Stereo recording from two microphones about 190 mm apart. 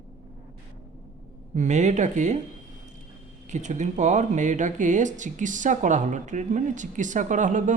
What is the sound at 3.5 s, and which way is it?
Speech, 40° right (ahead or behind).